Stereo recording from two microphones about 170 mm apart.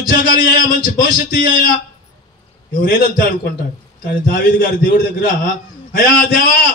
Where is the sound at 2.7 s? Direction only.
55° left (ahead or behind).